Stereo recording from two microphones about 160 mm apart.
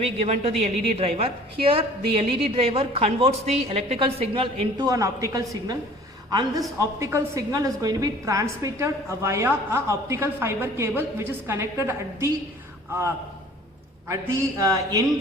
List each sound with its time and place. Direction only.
0.0 s a woman's voice: 40° right (ahead or behind)
4.9 s a man's voice: 20° right (ahead or behind)
14.1 s a man's voice: 20° right (ahead or behind)